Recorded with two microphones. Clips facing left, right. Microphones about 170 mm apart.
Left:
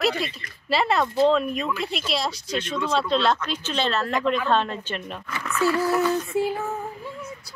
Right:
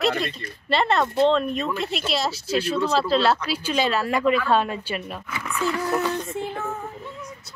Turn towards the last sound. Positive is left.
turn(degrees=-15)  # may be behind; listen again after turning